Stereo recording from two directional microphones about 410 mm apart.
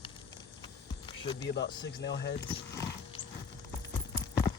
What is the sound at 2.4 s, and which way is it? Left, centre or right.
Speech, centre.